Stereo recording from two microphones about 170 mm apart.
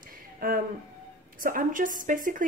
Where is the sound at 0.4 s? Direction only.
55° right (ahead or behind).